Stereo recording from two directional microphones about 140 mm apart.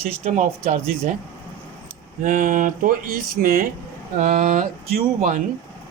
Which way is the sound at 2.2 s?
70° right (ahead or behind).